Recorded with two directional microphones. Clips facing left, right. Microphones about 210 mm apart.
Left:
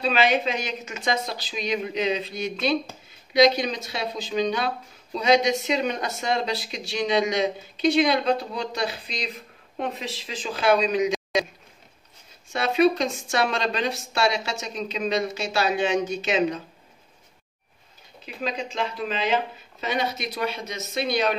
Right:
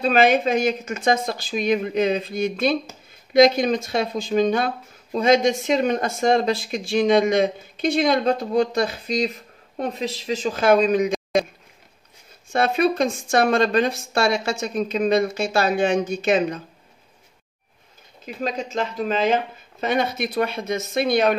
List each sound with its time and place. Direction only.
0.0 s speech: 50° right (ahead or behind)
12.5 s speech: 50° right (ahead or behind)
18.2 s speech: 45° right (ahead or behind)